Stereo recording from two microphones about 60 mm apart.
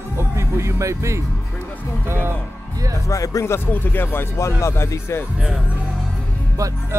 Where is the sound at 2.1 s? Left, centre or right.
Right.